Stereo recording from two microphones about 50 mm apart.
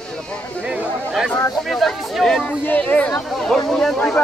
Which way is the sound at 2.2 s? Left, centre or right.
Centre.